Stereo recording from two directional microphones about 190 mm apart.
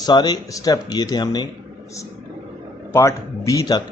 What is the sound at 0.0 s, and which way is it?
Speech, 20° left (ahead or behind).